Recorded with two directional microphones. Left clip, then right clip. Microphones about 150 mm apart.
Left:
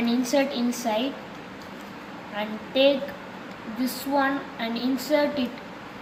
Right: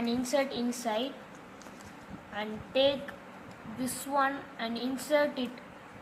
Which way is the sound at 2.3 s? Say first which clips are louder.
Left 5 dB; 45° right (ahead or behind).